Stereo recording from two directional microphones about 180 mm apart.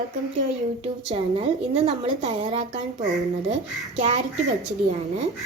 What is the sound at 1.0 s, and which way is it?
A woman's voice, 35° right (ahead or behind).